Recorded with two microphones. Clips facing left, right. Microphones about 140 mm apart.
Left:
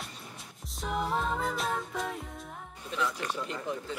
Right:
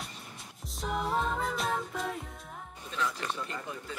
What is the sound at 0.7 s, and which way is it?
Music, centre (ahead or behind).